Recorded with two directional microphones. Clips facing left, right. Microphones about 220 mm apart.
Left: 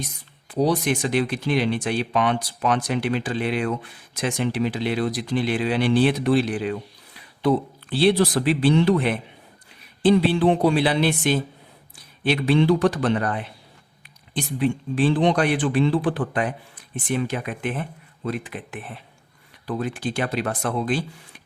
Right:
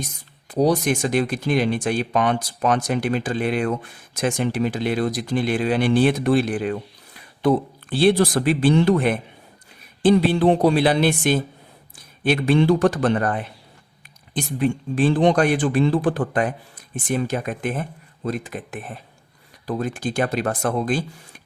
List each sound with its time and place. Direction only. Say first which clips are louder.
0.0 s speech: right 1 dB; 45° right (ahead or behind)